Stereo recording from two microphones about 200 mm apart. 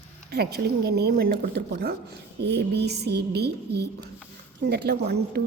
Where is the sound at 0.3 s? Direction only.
55° right (ahead or behind).